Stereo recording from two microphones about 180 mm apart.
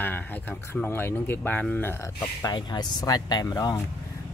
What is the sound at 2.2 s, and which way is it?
Speech, 25° left (ahead or behind).